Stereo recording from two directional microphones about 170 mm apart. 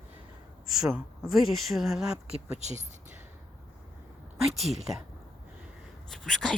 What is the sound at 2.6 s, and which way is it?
Speech, 45° right (ahead or behind).